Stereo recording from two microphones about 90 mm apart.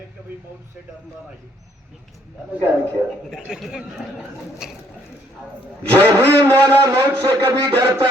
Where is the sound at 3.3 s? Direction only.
Centre (ahead or behind).